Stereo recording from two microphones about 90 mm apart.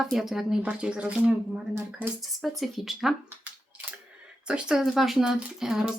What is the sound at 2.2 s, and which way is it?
Speech, centre (ahead or behind).